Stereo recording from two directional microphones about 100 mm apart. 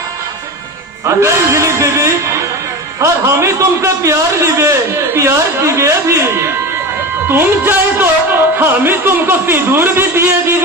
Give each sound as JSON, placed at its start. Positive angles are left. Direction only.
{"t": 1.0, "sound": "a man's voice", "side_deg": -30}